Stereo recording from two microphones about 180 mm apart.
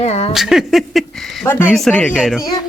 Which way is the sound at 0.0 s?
35° left (ahead or behind).